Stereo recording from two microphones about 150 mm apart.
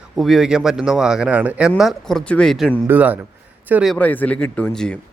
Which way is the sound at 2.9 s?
10° right (ahead or behind).